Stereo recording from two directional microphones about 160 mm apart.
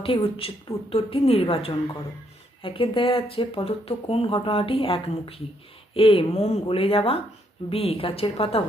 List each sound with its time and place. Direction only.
0.0 s speech: 35° left (ahead or behind)